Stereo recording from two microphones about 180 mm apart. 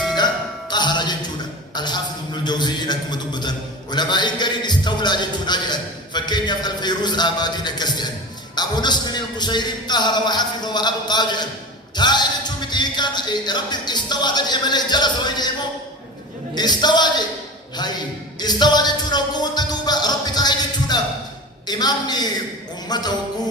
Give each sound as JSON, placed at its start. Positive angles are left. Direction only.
{"t": 0.7, "sound": "music", "side_deg": 25}
{"t": 1.7, "sound": "a sound", "side_deg": 25}
{"t": 3.9, "sound": "a man's voice", "side_deg": 25}
{"t": 8.5, "sound": "music", "side_deg": 25}
{"t": 16.6, "sound": "music", "side_deg": 25}
{"t": 18.3, "sound": "music", "side_deg": 25}